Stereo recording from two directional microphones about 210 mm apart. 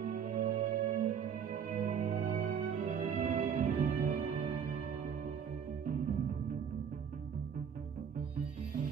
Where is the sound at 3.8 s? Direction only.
25° right (ahead or behind).